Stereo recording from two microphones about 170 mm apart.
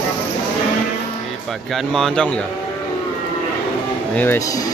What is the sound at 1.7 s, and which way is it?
Speech, centre (ahead or behind).